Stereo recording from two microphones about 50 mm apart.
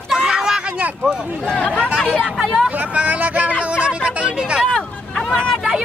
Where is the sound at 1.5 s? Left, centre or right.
Centre.